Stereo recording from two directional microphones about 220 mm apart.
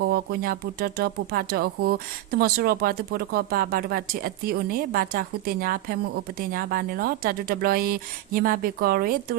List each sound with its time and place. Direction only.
0.1 s speech: 45° right (ahead or behind)